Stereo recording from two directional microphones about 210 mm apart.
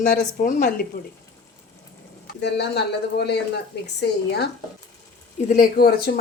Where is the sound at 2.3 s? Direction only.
55° left (ahead or behind).